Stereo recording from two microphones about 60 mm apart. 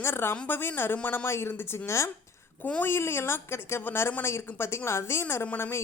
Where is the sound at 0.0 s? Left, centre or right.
Left.